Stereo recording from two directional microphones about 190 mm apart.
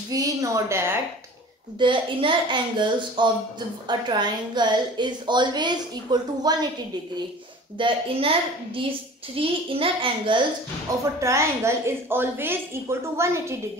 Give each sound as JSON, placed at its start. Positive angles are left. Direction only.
{"t": 0.1, "sound": "a woman's voice", "side_deg": -20}
{"t": 1.8, "sound": "a woman's voice", "side_deg": -25}
{"t": 7.7, "sound": "a woman's voice", "side_deg": -25}
{"t": 11.1, "sound": "a woman's voice", "side_deg": -15}